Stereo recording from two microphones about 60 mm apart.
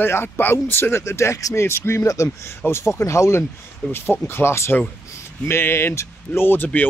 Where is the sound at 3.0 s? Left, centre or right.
Left.